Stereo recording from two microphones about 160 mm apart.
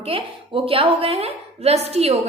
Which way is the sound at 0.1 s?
35° right (ahead or behind).